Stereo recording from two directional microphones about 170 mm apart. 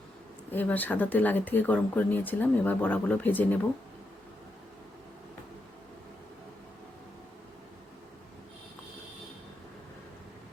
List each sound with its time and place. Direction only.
0.5 s speech: 10° left (ahead or behind)